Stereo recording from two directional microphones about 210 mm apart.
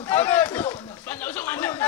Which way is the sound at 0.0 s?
10° left (ahead or behind).